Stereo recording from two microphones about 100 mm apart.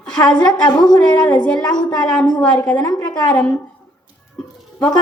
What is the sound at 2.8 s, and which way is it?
Speech, 40° left (ahead or behind).